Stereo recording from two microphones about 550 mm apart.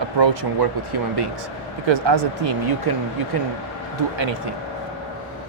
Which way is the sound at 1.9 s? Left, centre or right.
Right.